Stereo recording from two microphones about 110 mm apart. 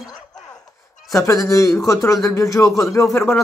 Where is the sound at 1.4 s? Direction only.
30° left (ahead or behind).